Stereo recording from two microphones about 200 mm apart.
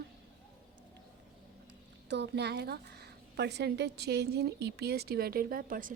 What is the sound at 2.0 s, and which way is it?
A woman's voice, 60° right (ahead or behind).